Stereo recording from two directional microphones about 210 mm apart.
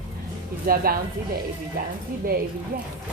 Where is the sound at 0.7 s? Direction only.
45° right (ahead or behind).